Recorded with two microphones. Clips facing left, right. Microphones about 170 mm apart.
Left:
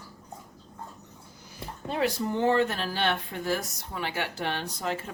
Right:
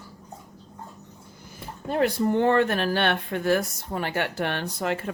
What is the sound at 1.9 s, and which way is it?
Speech, 55° right (ahead or behind).